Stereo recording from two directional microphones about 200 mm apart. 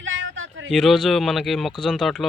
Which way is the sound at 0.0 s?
70° right (ahead or behind).